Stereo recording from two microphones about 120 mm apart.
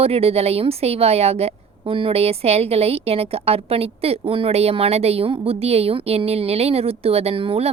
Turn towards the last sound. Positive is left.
turn(degrees=-50)  # may be behind; listen again after turning